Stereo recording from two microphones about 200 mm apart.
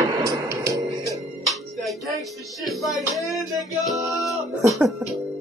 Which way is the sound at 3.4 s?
Centre (ahead or behind).